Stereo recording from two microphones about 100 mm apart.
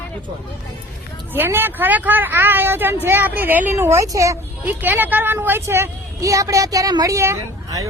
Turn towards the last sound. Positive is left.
turn(degrees=-30)  # may be behind; listen again after turning